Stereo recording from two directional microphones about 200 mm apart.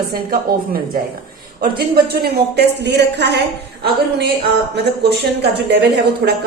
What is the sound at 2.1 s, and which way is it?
A woman's voice, 55° right (ahead or behind).